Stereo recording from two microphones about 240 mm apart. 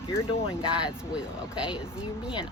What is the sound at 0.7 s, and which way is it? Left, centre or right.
Speech, centre.